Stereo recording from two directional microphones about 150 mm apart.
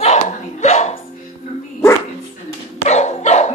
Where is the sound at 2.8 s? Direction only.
50° left (ahead or behind).